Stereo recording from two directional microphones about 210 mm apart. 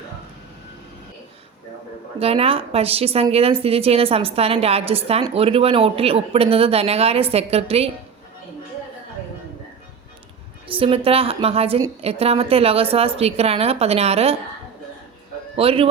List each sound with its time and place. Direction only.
2.1 s a woman's voice: 25° right (ahead or behind)
10.7 s a woman's voice: 25° right (ahead or behind)
15.5 s a woman's voice: 25° right (ahead or behind)